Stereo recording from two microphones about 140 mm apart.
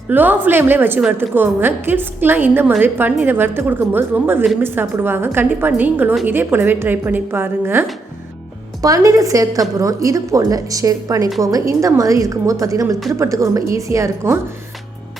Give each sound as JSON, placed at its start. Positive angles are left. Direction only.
{"t": 0.1, "sound": "a woman's voice", "side_deg": -15}